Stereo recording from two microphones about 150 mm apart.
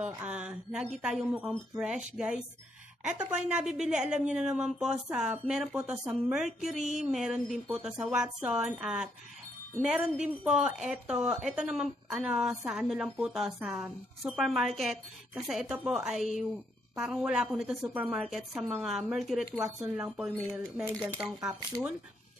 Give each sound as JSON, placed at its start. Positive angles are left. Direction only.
{"t": 0.0, "sound": "a woman's voice", "side_deg": -5}
{"t": 6.8, "sound": "a sound", "side_deg": -50}
{"t": 7.1, "sound": "a woman's voice", "side_deg": 0}